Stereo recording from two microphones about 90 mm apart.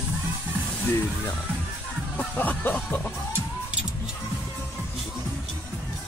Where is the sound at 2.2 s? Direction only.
20° left (ahead or behind).